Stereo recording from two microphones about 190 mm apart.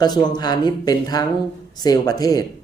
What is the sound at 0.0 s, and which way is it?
Speech, 20° left (ahead or behind).